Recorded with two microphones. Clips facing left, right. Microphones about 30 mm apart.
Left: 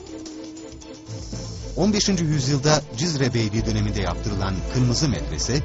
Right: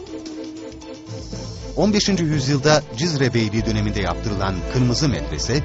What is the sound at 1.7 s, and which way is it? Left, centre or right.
Speech, centre.